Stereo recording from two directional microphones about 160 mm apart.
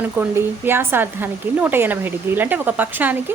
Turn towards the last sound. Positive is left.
turn(degrees=-10)  # may be behind; listen again after turning